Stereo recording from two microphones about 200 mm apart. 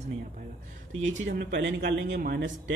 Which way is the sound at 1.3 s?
55° right (ahead or behind).